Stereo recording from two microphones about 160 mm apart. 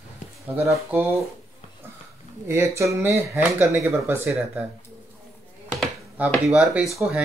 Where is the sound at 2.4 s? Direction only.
15° right (ahead or behind).